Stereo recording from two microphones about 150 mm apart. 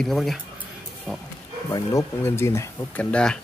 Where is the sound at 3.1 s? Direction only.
5° left (ahead or behind).